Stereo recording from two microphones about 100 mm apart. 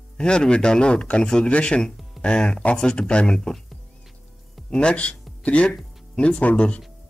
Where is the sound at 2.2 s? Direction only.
10° left (ahead or behind).